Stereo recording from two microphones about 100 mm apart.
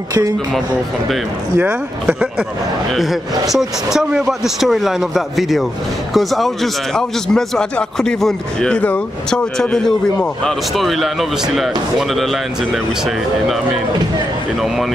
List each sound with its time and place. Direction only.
1.6 s speech: 15° right (ahead or behind)
2.9 s a man's voice: centre (ahead or behind)